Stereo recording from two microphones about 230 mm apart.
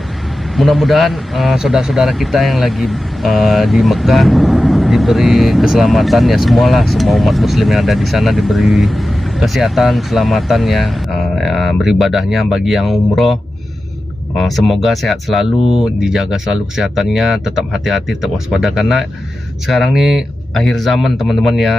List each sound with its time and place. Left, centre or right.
0.6 s speech: centre
14.4 s speech: centre